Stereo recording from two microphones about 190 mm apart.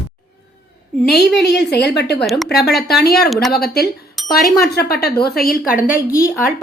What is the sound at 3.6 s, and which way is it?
Speech, 55° left (ahead or behind).